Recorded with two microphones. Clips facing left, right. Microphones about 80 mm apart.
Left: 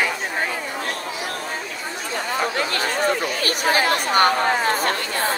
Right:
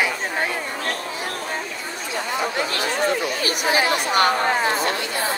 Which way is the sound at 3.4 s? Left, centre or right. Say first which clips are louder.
Left 1 dB; left.